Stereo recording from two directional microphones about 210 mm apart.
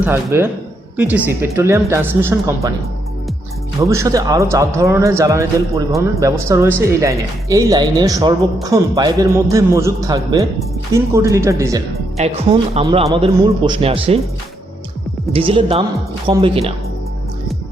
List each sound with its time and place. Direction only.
0.0 s a man's voice: 10° right (ahead or behind)
3.8 s a man's voice: 15° right (ahead or behind)
12.1 s a man's voice: 30° right (ahead or behind)
15.3 s a man's voice: 25° right (ahead or behind)